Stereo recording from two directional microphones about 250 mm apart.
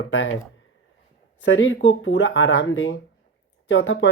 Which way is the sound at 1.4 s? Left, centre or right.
Left.